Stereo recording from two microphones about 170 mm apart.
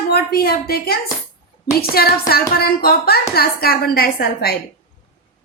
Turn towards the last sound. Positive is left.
turn(degrees=65)  # may be behind; listen again after turning